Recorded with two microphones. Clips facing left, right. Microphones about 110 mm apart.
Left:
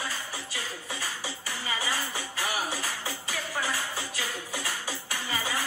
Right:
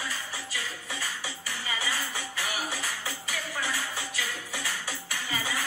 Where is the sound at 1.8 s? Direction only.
35° left (ahead or behind).